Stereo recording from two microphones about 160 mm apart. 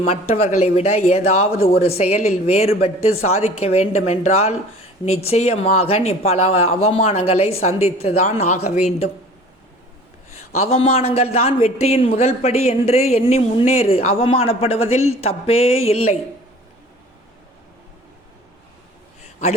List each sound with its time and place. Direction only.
0.1 s a man's voice: 40° left (ahead or behind)
10.6 s a man's voice: 40° left (ahead or behind)
19.2 s a sound: 45° left (ahead or behind)